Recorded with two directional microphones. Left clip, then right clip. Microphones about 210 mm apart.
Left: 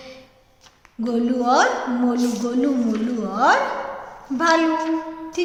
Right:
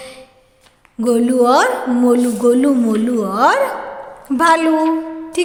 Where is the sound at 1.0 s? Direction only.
50° right (ahead or behind).